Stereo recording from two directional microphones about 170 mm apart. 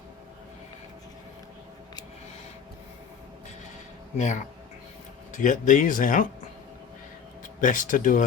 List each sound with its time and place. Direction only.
4.2 s speech: 45° left (ahead or behind)
7.6 s speech: 50° left (ahead or behind)